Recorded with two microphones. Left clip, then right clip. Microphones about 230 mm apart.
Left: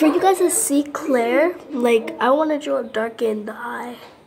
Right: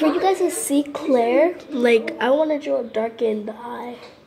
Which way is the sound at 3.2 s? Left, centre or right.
Centre.